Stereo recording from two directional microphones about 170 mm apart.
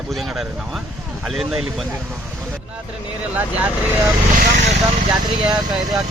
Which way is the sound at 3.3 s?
10° right (ahead or behind).